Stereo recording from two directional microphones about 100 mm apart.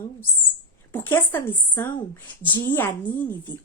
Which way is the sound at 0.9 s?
20° left (ahead or behind).